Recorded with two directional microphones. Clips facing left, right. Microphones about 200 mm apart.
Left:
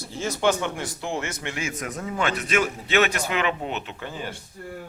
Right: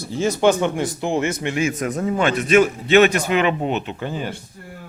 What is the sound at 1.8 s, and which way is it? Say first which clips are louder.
Speech: right 9 dB; 35° right (ahead or behind).